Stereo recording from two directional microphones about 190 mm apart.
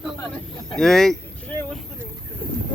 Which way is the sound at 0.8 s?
Centre (ahead or behind).